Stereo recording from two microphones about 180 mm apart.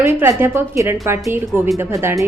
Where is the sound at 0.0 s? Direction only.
15° right (ahead or behind).